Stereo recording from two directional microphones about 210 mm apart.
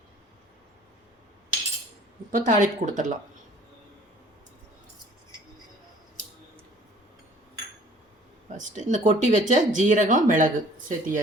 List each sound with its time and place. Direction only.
2.3 s speech: 40° right (ahead or behind)
8.5 s speech: 35° right (ahead or behind)